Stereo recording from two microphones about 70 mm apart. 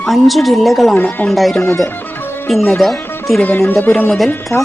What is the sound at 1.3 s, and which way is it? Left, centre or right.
Speech, centre.